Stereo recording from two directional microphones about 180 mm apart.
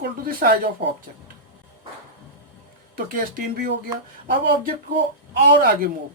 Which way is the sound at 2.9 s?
50° right (ahead or behind).